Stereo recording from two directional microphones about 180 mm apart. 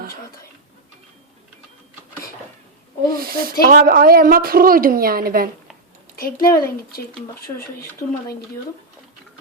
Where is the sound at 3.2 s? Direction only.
55° right (ahead or behind).